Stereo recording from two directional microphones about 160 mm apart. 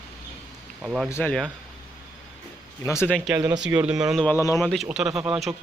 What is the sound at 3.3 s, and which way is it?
Speech, 15° right (ahead or behind).